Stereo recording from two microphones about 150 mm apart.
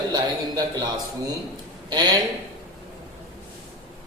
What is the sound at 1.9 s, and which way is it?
Speech, 30° right (ahead or behind).